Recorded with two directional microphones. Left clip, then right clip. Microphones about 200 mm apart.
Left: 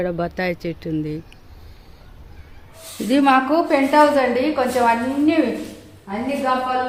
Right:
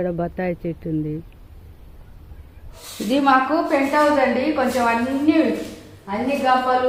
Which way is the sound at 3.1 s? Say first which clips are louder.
Left 1 dB; 30° left (ahead or behind).